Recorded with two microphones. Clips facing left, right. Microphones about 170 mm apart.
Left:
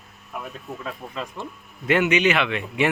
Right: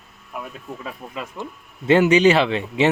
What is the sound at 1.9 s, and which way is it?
Speech, 30° right (ahead or behind).